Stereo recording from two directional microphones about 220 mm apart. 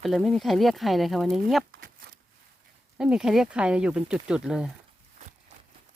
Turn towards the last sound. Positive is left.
turn(degrees=-5)  # may be behind; listen again after turning